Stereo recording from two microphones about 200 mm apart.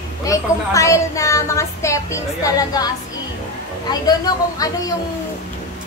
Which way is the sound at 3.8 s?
20° left (ahead or behind).